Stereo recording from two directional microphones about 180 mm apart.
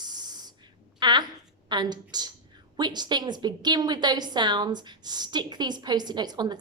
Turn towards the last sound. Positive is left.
turn(degrees=-25)  # may be behind; listen again after turning